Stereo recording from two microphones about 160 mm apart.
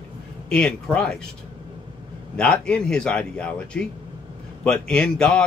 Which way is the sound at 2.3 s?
5° left (ahead or behind).